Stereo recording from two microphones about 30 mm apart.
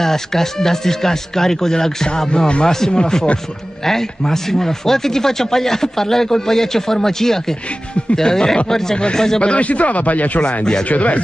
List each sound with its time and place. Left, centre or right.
0.0 s speech: centre
2.2 s speech: left
9.4 s speech: left
10.6 s speech: left
10.9 s speech: left